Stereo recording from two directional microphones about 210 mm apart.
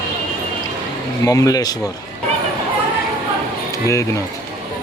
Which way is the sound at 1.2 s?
15° left (ahead or behind).